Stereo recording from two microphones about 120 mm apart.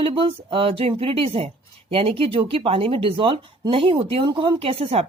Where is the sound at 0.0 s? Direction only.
50° right (ahead or behind).